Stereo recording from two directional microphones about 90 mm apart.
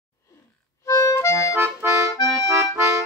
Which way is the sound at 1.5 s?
20° right (ahead or behind).